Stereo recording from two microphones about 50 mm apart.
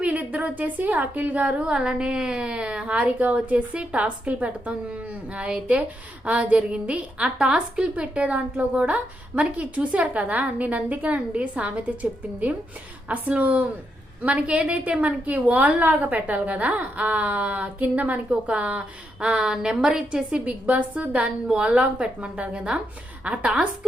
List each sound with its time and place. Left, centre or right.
0.0 s a woman's voice: right
19.2 s a woman's voice: centre